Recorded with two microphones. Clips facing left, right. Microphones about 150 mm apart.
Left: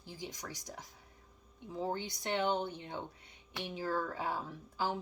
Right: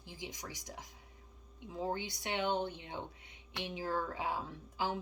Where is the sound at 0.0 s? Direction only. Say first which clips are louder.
Left 1 dB; 15° right (ahead or behind).